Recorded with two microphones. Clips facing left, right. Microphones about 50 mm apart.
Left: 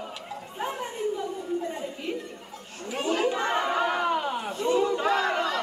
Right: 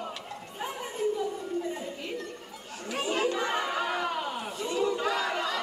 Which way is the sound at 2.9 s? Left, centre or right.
Centre.